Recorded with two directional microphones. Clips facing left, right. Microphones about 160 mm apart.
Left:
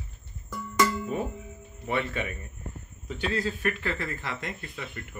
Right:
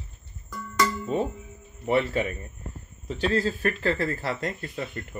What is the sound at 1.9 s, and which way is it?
Speech, 30° right (ahead or behind).